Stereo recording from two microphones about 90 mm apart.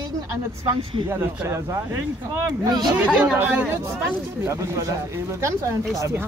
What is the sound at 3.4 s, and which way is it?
Speech, 25° right (ahead or behind).